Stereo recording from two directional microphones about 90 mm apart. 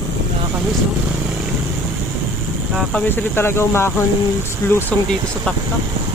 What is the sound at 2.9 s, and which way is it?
Speech, 20° left (ahead or behind).